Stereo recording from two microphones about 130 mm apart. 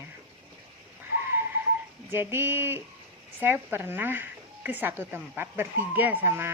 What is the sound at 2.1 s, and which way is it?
Speech, 20° right (ahead or behind).